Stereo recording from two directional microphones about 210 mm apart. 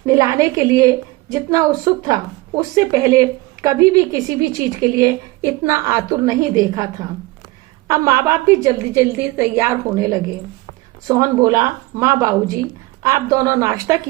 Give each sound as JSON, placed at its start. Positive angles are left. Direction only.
{"t": 0.0, "sound": "a woman's voice", "side_deg": -15}
{"t": 7.9, "sound": "a woman's voice", "side_deg": -15}